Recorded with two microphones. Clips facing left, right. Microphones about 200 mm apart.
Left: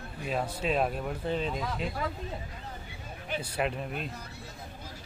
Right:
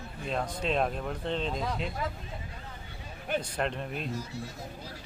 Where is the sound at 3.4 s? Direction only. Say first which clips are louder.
Left 1 dB; 5° left (ahead or behind).